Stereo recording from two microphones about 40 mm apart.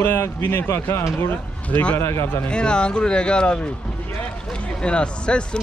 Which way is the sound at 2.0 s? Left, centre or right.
Left.